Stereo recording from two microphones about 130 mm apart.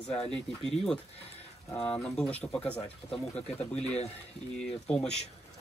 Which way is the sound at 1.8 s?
5° left (ahead or behind).